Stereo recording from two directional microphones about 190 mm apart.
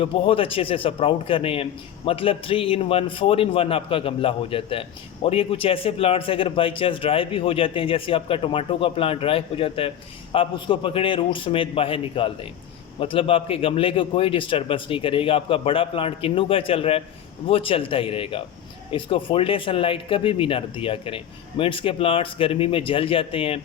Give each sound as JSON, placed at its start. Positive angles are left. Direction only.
{"t": 0.0, "sound": "a man's voice", "side_deg": 30}